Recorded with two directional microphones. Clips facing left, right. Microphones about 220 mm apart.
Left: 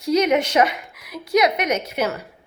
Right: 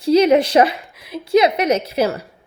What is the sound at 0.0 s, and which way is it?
A woman's voice, 30° right (ahead or behind).